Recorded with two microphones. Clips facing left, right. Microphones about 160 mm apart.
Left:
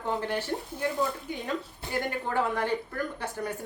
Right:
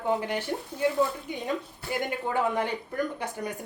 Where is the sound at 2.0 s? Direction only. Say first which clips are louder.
Right 1 dB; 15° right (ahead or behind).